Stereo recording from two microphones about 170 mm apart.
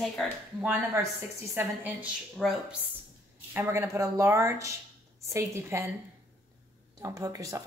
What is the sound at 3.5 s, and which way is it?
Speech, 15° right (ahead or behind).